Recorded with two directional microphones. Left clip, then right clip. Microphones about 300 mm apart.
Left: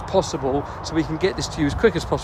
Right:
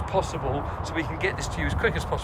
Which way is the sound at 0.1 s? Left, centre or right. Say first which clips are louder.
Left 6 dB; centre.